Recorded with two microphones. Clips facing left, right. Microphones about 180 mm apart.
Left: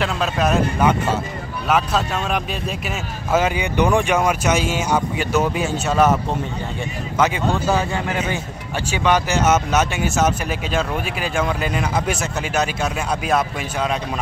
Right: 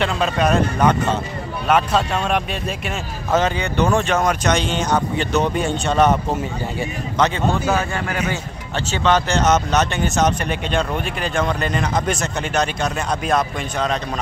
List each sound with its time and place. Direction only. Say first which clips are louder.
0.0 s speech: right 1 dB; centre (ahead or behind)
7.2 s speech: even; 5° left (ahead or behind)
8.1 s speech: even; 20° left (ahead or behind)
8.9 s speech: right 1 dB; 10° left (ahead or behind)